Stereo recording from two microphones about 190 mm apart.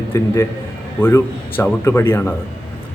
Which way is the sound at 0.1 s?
15° left (ahead or behind).